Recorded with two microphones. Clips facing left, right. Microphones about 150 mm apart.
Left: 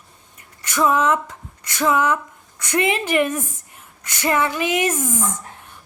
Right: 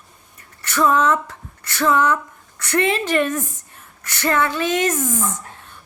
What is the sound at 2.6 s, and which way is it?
A woman's voice, 15° left (ahead or behind).